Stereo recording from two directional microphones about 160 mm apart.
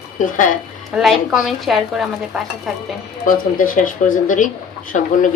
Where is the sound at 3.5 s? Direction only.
60° left (ahead or behind).